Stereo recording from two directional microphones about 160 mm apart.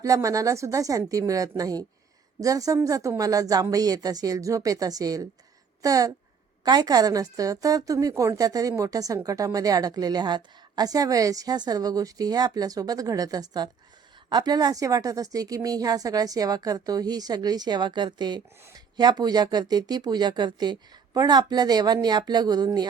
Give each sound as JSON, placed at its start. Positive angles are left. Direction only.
{"t": 0.0, "sound": "a woman's voice", "side_deg": -20}